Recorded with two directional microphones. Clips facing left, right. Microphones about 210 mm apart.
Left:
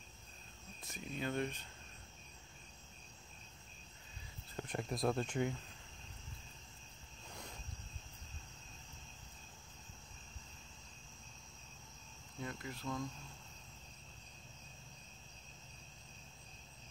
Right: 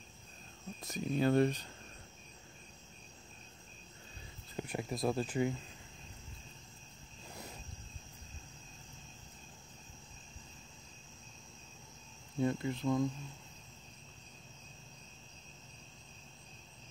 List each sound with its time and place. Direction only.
0.8 s speech: 40° right (ahead or behind)
4.6 s speech: 10° right (ahead or behind)
12.4 s speech: 25° right (ahead or behind)